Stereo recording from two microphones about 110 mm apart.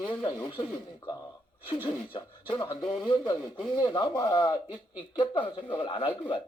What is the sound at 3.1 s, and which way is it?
Speech, 50° left (ahead or behind).